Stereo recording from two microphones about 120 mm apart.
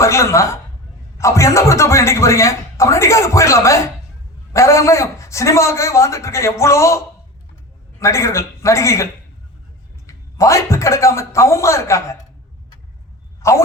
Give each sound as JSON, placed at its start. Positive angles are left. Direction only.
{"t": 0.0, "sound": "speech", "side_deg": 25}
{"t": 10.1, "sound": "speech", "side_deg": 25}
{"t": 13.4, "sound": "speech", "side_deg": 25}